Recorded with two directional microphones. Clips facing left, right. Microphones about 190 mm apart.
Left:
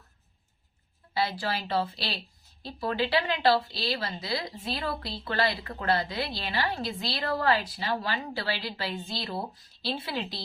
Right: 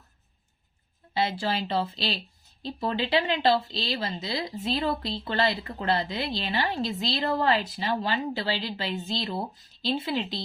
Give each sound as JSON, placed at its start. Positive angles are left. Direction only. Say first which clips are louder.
{"t": 1.1, "sound": "speech", "louder": "right 2 dB", "side_deg": -25}